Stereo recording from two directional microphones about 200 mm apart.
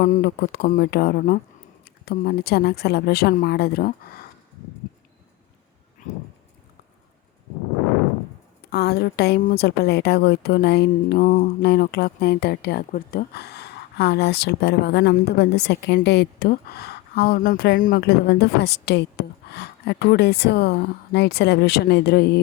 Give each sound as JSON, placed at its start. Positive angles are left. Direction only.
{"t": 0.0, "sound": "speech", "side_deg": 45}
{"t": 8.7, "sound": "speech", "side_deg": 55}